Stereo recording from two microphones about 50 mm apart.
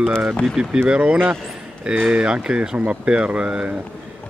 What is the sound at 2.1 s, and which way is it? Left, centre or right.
Speech, centre.